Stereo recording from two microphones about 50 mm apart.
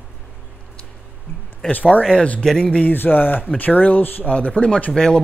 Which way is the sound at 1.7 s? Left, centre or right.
Left.